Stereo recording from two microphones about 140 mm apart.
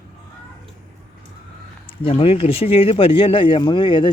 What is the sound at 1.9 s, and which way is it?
Speech, 40° left (ahead or behind).